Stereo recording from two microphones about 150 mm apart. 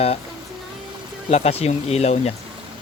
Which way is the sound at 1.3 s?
45° left (ahead or behind).